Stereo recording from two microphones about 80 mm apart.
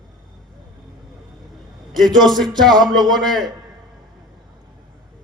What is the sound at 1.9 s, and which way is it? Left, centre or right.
A man's voice, centre.